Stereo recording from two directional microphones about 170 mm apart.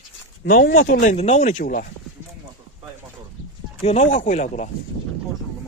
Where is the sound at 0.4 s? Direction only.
55° left (ahead or behind).